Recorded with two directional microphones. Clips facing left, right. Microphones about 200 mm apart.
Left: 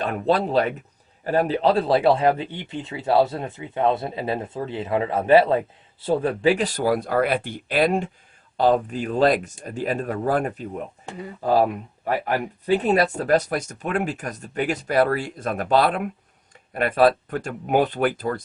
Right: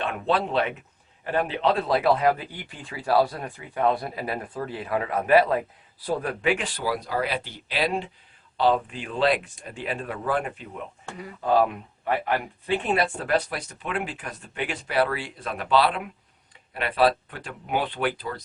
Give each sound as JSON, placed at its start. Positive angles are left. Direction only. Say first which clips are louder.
{"t": 0.0, "sound": "a man's voice", "louder": "left 4 dB", "side_deg": 40}